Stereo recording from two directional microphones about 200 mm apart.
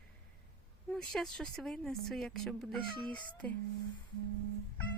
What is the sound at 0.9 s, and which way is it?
Speech, 5° left (ahead or behind).